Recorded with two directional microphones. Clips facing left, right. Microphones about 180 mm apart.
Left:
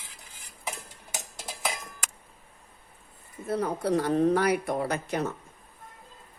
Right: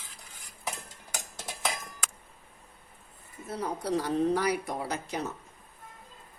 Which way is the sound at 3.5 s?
60° left (ahead or behind).